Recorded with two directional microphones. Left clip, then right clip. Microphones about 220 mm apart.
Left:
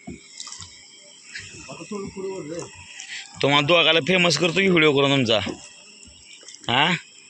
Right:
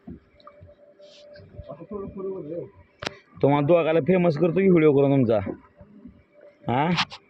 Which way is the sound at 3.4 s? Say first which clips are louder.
Left 2 dB; 30° right (ahead or behind).